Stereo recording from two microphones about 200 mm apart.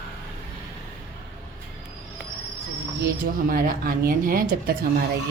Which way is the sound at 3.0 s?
50° right (ahead or behind).